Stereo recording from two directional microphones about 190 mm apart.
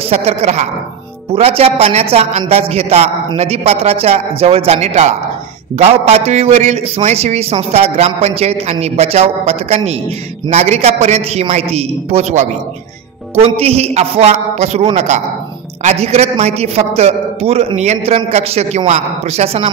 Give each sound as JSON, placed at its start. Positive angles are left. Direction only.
{"t": 0.1, "sound": "a man's voice", "side_deg": -35}